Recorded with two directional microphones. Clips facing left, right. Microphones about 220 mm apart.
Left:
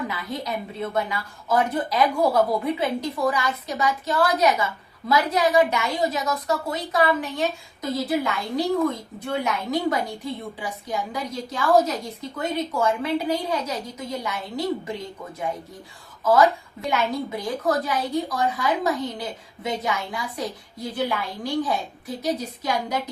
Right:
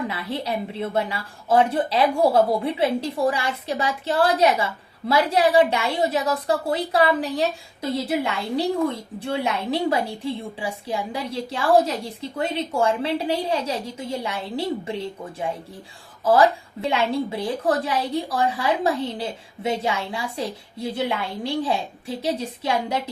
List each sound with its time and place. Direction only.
0.1 s a woman's voice: 30° right (ahead or behind)